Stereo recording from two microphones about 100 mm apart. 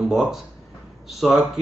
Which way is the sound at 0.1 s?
5° right (ahead or behind).